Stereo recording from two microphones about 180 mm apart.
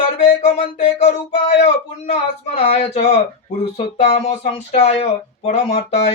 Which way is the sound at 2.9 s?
35° left (ahead or behind).